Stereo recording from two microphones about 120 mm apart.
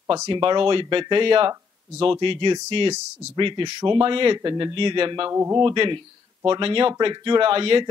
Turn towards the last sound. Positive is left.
turn(degrees=-50)  # may be behind; listen again after turning